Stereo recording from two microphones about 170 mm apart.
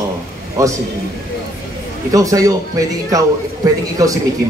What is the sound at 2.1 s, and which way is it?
A man's voice, 20° right (ahead or behind).